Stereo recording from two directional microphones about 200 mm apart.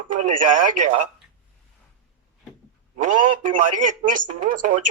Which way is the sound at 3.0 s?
40° right (ahead or behind).